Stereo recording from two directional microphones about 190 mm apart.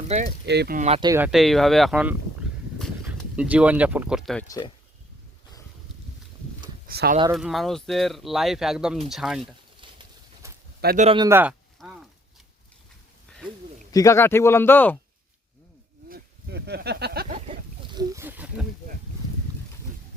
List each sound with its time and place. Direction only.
0.3 s speech: 60° right (ahead or behind)
0.8 s speech: 35° right (ahead or behind)
1.0 s speech: 15° right (ahead or behind)
1.3 s speech: centre (ahead or behind)
4.4 s speech: 20° left (ahead or behind)
6.8 s speech: 55° right (ahead or behind)
7.3 s speech: centre (ahead or behind)
9.8 s pigeon: 25° right (ahead or behind)
10.4 s a sound: 15° right (ahead or behind)
10.9 s speech: 35° right (ahead or behind)
11.2 s speech: 10° right (ahead or behind)
13.9 s speech: 15° left (ahead or behind)
16.0 s a sound: 55° right (ahead or behind)
17.9 s a sound: 15° right (ahead or behind)